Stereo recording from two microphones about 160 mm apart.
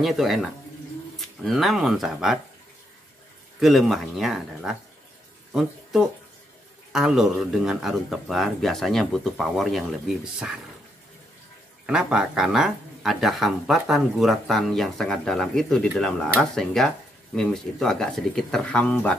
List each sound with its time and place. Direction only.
0.0 s speech: centre (ahead or behind)
3.5 s speech: centre (ahead or behind)
11.8 s speech: 5° right (ahead or behind)